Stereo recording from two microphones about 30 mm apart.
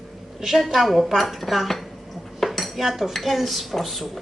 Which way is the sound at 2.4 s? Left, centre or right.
Centre.